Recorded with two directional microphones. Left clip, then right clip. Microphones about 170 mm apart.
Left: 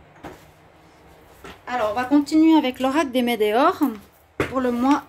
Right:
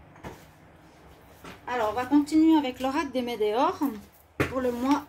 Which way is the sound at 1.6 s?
70° left (ahead or behind).